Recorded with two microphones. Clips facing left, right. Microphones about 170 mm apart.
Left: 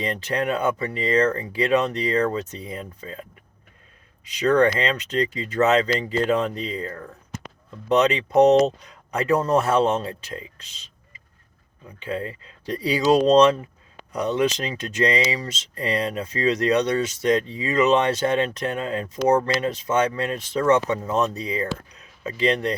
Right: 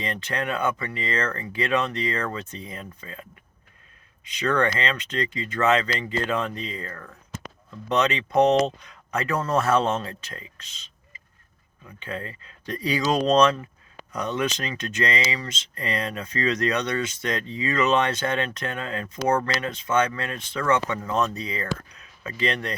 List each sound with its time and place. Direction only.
0.0 s speech: 35° left (ahead or behind)
4.3 s speech: 35° left (ahead or behind)
8.4 s speech: 40° left (ahead or behind)
9.3 s speech: 15° left (ahead or behind)
9.6 s speech: 30° left (ahead or behind)
9.8 s speech: 15° left (ahead or behind)
10.1 s speech: 30° left (ahead or behind)
11.9 s speech: 30° left (ahead or behind)
19.7 s speech: 35° left (ahead or behind)
20.3 s speech: 25° left (ahead or behind)